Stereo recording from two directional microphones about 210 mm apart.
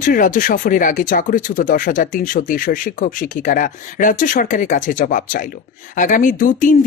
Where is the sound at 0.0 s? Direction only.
40° left (ahead or behind).